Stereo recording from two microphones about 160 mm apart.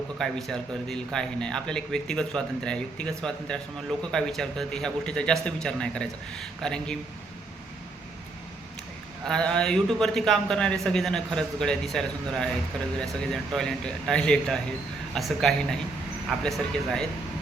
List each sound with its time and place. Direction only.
0.2 s a man's voice: centre (ahead or behind)
9.2 s a man's voice: 5° left (ahead or behind)